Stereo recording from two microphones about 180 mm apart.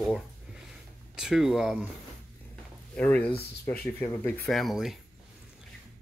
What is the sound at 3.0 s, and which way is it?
Speech, 10° left (ahead or behind).